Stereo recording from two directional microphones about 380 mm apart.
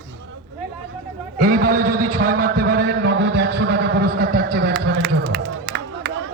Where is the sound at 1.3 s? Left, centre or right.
Right.